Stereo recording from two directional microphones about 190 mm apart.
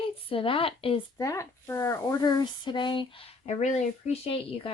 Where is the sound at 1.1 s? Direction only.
15° left (ahead or behind).